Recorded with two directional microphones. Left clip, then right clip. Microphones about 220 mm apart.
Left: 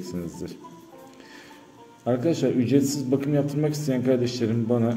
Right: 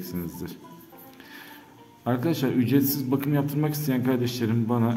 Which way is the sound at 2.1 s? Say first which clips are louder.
Left 3 dB; 20° right (ahead or behind).